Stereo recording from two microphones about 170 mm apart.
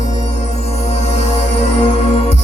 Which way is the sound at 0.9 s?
40° left (ahead or behind).